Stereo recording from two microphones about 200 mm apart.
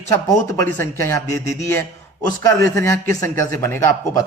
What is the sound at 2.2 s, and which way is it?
Speech, 15° left (ahead or behind).